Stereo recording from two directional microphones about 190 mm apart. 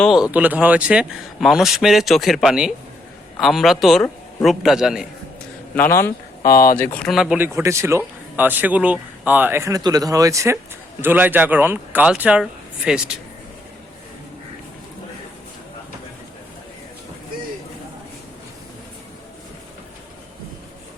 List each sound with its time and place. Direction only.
0.0 s speech: 5° right (ahead or behind)
5.7 s speech: 10° left (ahead or behind)
6.4 s speech: 50° left (ahead or behind)
6.7 s speech: 10° left (ahead or behind)